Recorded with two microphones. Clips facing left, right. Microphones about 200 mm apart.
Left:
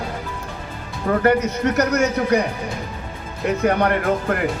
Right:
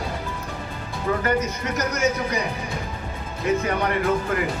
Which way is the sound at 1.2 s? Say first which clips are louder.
Left 6 dB; 65° left (ahead or behind).